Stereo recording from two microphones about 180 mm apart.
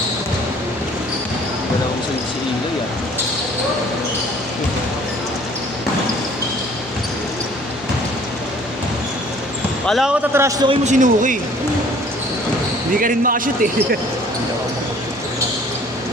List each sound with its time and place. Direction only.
9.8 s speech: centre (ahead or behind)
10.3 s a man's voice: 15° right (ahead or behind)
10.7 s speech: 40° right (ahead or behind)
13.0 s speech: 50° right (ahead or behind)